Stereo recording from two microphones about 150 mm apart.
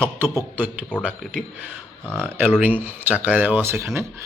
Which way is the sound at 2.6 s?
10° right (ahead or behind).